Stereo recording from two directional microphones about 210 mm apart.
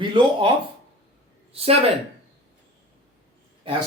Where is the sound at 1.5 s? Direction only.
30° right (ahead or behind).